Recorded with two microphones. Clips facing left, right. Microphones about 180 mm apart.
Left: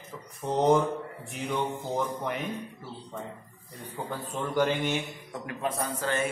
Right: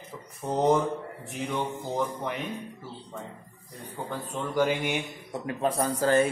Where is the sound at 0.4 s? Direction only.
5° right (ahead or behind).